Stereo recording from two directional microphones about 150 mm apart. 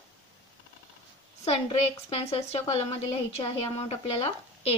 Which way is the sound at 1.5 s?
45° left (ahead or behind).